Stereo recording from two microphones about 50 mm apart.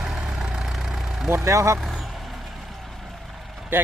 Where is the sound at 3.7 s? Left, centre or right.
Right.